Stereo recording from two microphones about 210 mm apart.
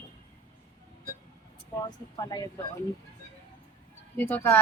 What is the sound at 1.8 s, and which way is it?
Speech, 20° left (ahead or behind).